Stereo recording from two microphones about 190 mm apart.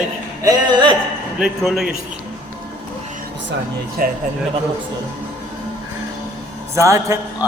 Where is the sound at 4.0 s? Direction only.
50° right (ahead or behind).